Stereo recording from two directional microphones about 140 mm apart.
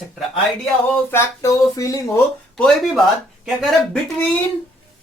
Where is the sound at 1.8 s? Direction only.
25° left (ahead or behind).